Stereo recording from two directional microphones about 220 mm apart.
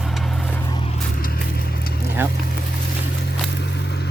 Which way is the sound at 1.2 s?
45° left (ahead or behind).